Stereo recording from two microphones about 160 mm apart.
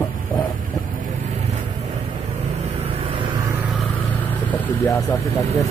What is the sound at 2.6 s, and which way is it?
Vehicle, 35° right (ahead or behind).